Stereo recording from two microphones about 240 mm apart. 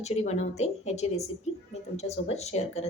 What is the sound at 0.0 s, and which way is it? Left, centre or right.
A woman's voice, left.